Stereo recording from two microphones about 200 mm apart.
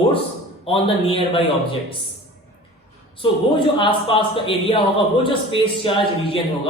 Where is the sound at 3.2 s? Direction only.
25° left (ahead or behind).